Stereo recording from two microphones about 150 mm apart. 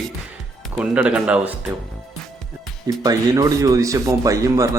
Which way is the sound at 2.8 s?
25° right (ahead or behind).